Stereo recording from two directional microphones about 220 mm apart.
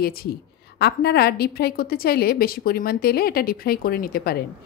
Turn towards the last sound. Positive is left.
turn(degrees=40)  # may be behind; listen again after turning